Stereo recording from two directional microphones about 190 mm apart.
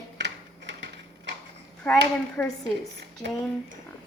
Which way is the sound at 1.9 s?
10° left (ahead or behind).